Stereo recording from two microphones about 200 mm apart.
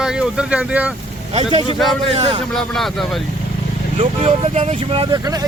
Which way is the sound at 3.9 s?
35° right (ahead or behind).